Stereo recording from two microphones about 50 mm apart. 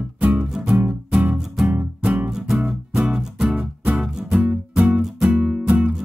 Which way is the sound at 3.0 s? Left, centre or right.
Centre.